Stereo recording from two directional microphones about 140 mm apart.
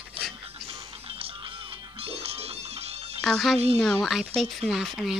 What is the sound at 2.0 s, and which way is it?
Music, 45° right (ahead or behind).